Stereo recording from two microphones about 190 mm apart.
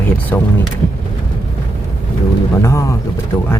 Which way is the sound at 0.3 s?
10° left (ahead or behind).